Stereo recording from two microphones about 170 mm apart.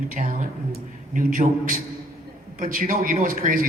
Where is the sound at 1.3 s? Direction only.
55° right (ahead or behind).